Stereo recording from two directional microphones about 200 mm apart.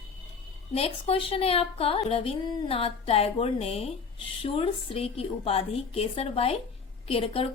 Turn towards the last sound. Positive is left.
turn(degrees=30)  # may be behind; listen again after turning